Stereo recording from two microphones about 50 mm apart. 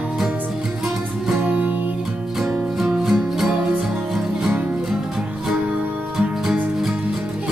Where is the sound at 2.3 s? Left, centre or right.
Centre.